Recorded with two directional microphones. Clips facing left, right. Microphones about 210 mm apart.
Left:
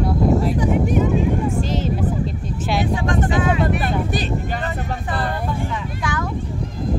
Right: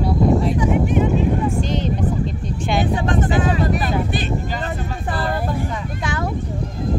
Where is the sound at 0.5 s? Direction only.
40° left (ahead or behind).